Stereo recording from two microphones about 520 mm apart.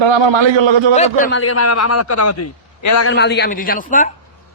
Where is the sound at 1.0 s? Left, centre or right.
Centre.